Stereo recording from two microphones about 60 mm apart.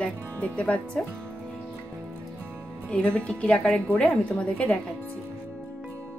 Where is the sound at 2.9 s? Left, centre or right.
Centre.